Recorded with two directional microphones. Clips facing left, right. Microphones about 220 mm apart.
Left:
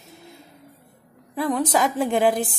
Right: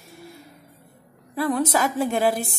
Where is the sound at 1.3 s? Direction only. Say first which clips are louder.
Even; 15° left (ahead or behind).